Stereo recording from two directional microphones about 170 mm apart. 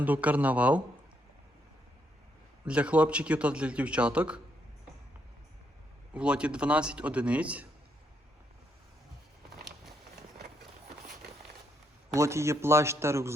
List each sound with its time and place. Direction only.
0.0 s a man's voice: 10° right (ahead or behind)
2.6 s a man's voice: 5° right (ahead or behind)
6.1 s a man's voice: 5° right (ahead or behind)
12.1 s a man's voice: 15° right (ahead or behind)